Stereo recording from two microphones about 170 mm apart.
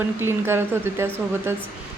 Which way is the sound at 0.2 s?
15° right (ahead or behind).